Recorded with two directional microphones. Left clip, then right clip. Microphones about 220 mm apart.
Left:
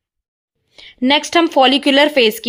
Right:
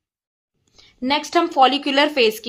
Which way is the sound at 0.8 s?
40° left (ahead or behind).